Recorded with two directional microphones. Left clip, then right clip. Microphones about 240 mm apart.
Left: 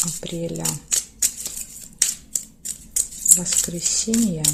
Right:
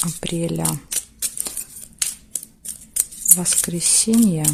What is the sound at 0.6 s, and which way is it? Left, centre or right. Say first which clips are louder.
Shuffling cards: left 2 dB; centre.